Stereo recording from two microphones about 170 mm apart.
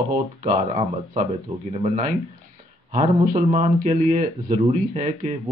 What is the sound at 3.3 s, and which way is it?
Speech, 40° right (ahead or behind).